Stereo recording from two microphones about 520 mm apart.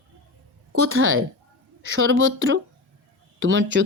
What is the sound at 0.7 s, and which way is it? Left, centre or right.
A woman's voice, right.